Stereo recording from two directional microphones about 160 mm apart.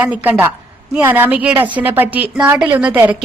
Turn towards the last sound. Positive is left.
turn(degrees=-10)  # may be behind; listen again after turning